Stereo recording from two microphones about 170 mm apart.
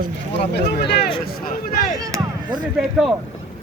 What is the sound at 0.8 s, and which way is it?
Speech, 70° left (ahead or behind).